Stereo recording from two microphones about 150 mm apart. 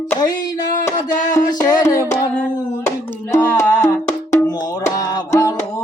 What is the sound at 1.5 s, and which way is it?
Music, 25° left (ahead or behind).